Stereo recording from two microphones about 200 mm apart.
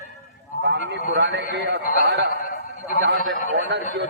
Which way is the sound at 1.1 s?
55° right (ahead or behind).